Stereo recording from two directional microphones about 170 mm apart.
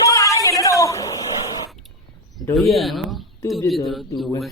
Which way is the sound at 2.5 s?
Centre (ahead or behind).